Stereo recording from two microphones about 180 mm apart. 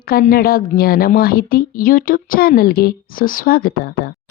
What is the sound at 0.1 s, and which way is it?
A woman's voice, 55° left (ahead or behind).